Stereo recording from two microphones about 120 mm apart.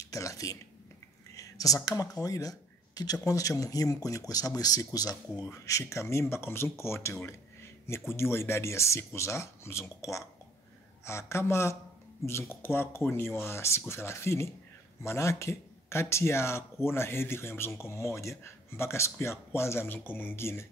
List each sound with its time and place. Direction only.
0.0 s speech: 25° left (ahead or behind)
1.3 s whispering: 30° left (ahead or behind)
2.2 s speech: 30° left (ahead or behind)